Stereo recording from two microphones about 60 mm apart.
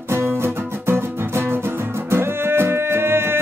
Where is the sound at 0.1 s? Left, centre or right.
Right.